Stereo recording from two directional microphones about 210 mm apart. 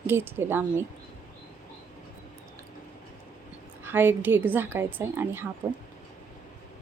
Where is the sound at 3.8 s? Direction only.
10° right (ahead or behind).